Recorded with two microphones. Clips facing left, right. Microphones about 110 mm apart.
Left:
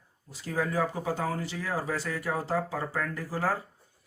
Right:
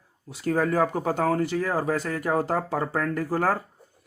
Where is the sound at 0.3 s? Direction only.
60° right (ahead or behind).